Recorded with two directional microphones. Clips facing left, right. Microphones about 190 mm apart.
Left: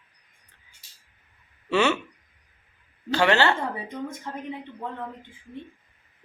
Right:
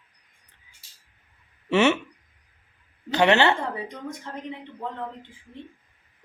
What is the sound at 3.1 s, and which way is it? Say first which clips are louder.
Speech: right 2 dB; 20° right (ahead or behind).